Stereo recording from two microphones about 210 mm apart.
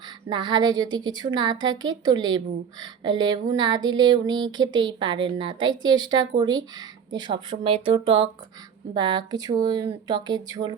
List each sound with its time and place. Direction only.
0.3 s speech: 20° right (ahead or behind)